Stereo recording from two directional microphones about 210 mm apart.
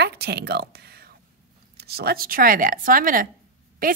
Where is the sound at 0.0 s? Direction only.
50° right (ahead or behind).